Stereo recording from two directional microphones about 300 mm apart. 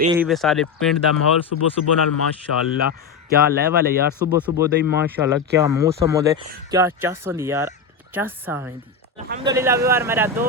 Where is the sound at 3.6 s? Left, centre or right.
Right.